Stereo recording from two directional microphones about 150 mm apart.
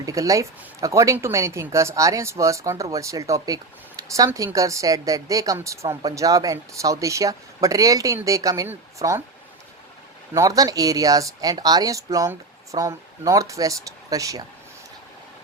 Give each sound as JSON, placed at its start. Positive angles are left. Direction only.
{"t": 0.0, "sound": "speech", "side_deg": -20}
{"t": 10.3, "sound": "speech", "side_deg": -20}